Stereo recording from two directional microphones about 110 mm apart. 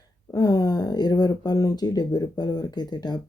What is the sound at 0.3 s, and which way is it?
Speech, 35° left (ahead or behind).